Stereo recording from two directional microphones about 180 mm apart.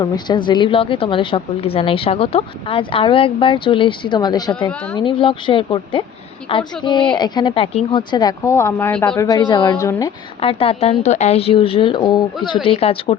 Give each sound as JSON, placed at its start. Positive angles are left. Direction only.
{"t": 0.0, "sound": "a woman's voice", "side_deg": 25}
{"t": 10.4, "sound": "a woman's voice", "side_deg": 30}